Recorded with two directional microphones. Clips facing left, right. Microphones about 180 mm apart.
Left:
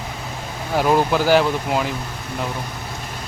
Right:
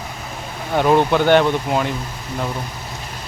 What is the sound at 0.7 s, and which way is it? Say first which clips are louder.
Speech: right 2 dB; 5° left (ahead or behind).